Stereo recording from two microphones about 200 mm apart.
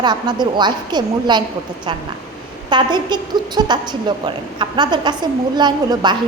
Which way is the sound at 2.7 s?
20° right (ahead or behind).